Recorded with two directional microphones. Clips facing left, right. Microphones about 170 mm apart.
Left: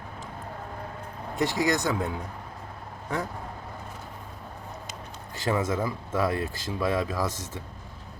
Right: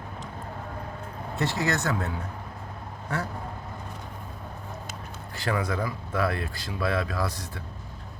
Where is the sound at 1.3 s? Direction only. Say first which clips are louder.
Left 2 dB; 15° left (ahead or behind).